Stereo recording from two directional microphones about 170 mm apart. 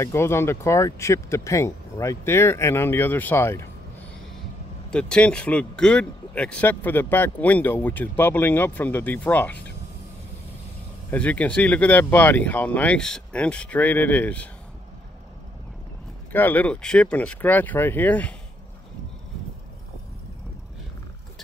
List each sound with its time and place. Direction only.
0.0 s speech: 15° left (ahead or behind)
4.9 s speech: 5° left (ahead or behind)
11.1 s speech: 10° left (ahead or behind)
16.3 s speech: 10° left (ahead or behind)